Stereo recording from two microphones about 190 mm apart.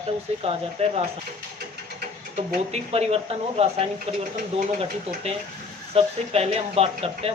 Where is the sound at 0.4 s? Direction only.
30° right (ahead or behind).